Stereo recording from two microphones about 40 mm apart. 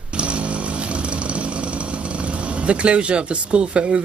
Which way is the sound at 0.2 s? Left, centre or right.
Right.